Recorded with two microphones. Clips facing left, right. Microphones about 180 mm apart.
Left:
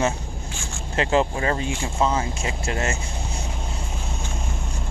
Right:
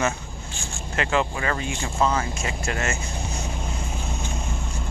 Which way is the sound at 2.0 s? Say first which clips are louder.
Even; 20° left (ahead or behind).